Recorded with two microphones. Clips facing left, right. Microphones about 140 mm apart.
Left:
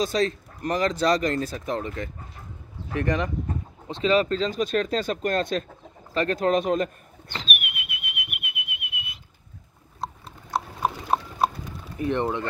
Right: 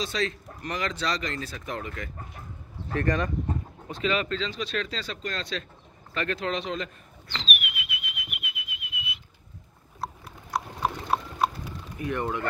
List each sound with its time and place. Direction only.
0.0 s speech: 40° left (ahead or behind)
2.9 s speech: 15° left (ahead or behind)
3.8 s speech: 30° left (ahead or behind); by 5.7 s 50° left (ahead or behind)
6.1 s whistling: 40° left (ahead or behind); by 9.1 s 65° left (ahead or behind)
9.9 s biting: 20° left (ahead or behind)
12.0 s speech: 25° left (ahead or behind)